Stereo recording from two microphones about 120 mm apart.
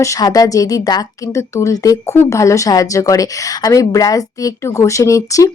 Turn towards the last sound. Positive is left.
turn(degrees=25)  # may be behind; listen again after turning